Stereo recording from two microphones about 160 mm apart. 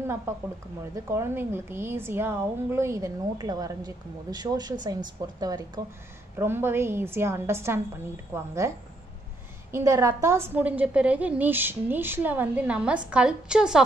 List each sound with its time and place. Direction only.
0.9 s a woman's voice: 15° right (ahead or behind)
6.3 s a woman's voice: 15° right (ahead or behind)